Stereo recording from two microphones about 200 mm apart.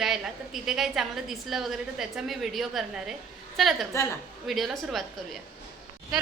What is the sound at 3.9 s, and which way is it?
Speech, 15° left (ahead or behind).